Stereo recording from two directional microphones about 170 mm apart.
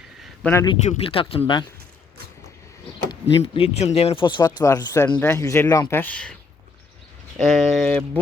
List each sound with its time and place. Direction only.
0.5 s speech: 25° left (ahead or behind)
3.1 s speech: 30° left (ahead or behind); by 6.3 s 5° left (ahead or behind)
7.4 s speech: centre (ahead or behind)